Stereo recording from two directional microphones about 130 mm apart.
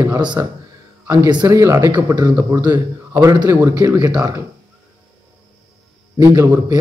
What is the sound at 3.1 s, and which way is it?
A man's voice, 20° right (ahead or behind).